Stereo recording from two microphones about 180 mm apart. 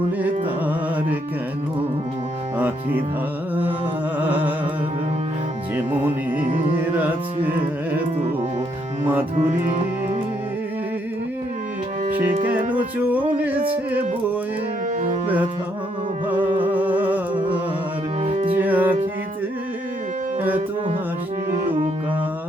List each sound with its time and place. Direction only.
2.6 s music: 10° right (ahead or behind)
4.2 s music: 10° right (ahead or behind)
5.7 s music: 10° right (ahead or behind)
9.5 s music: 40° right (ahead or behind)
12.7 s music: 10° right (ahead or behind)
16.7 s music: 10° right (ahead or behind)
18.2 s music: 35° right (ahead or behind)
18.5 s music: 10° right (ahead or behind)